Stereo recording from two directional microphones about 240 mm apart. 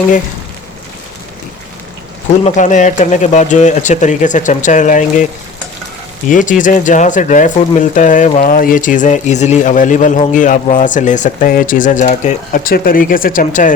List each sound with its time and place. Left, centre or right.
2.4 s speech: left